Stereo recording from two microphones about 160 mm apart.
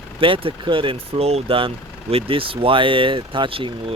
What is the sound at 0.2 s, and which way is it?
Speech, 35° right (ahead or behind).